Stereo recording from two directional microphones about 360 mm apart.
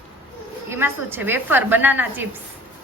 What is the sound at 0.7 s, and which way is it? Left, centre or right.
A woman's voice, centre.